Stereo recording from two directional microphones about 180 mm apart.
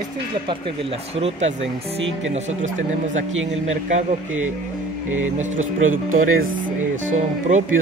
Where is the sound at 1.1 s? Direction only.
35° right (ahead or behind).